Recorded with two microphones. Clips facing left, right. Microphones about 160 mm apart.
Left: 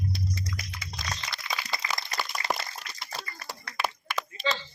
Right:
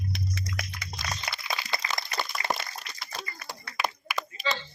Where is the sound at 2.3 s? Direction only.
15° left (ahead or behind).